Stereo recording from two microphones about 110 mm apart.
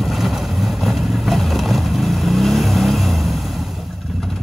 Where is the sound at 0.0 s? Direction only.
Centre (ahead or behind).